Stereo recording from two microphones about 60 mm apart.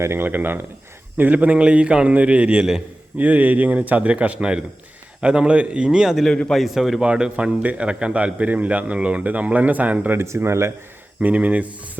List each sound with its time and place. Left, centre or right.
0.0 s speech: right
0.3 s a man's voice: right; by 7.0 s centre
7.0 s speech: centre
10.2 s speech: right
11.2 s speech: right